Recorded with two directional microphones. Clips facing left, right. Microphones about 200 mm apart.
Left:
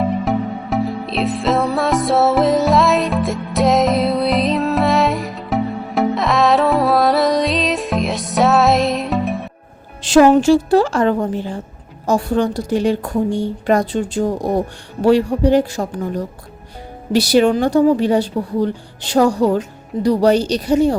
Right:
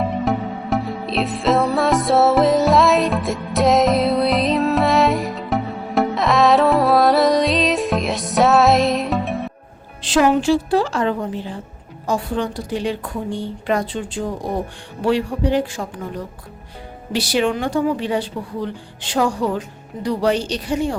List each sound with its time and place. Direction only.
0.3 s music: centre (ahead or behind)
10.0 s a woman's voice: 45° left (ahead or behind)